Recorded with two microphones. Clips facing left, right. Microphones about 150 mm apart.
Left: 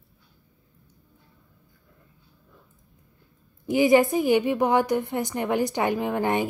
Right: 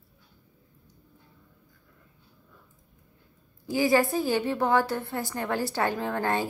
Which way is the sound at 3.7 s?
20° left (ahead or behind).